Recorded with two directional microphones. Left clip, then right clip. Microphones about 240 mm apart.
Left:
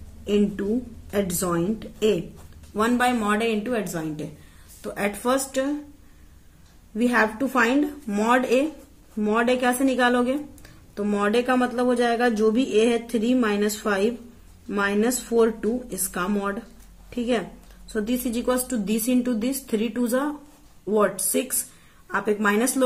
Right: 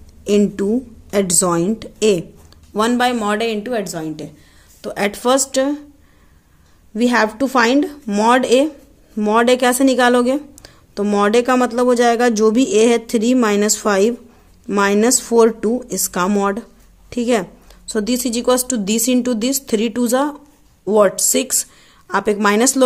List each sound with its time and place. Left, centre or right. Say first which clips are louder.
1.1 s a woman's voice: right 8 dB; right
7.0 s a woman's voice: right 6 dB; right